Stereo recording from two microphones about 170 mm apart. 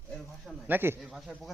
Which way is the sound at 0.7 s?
10° right (ahead or behind).